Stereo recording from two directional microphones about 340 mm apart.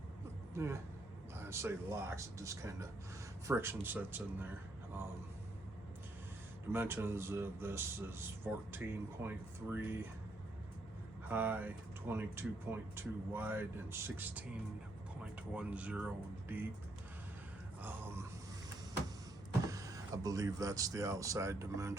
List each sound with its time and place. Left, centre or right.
0.5 s speech: centre
6.7 s speech: centre
11.3 s speech: centre
19.6 s speech: centre